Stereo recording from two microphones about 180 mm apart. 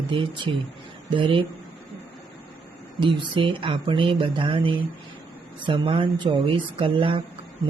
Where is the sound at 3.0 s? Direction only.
30° right (ahead or behind).